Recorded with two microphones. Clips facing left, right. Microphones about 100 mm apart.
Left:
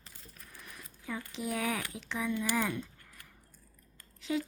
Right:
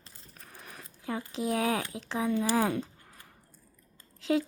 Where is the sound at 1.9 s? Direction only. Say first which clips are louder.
Right 4 dB; 90° right.